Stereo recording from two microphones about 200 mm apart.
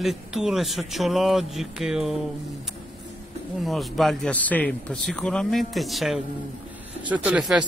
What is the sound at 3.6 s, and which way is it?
A man's voice, centre (ahead or behind).